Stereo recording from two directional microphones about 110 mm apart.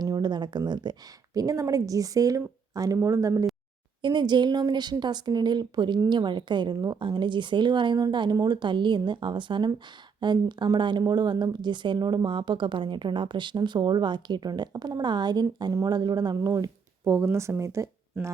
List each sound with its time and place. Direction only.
0.0 s a woman's voice: 40° right (ahead or behind)
4.0 s a woman's voice: 40° right (ahead or behind)
17.0 s speech: 20° right (ahead or behind)